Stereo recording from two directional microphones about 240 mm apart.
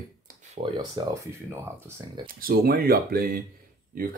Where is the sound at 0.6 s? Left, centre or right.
Centre.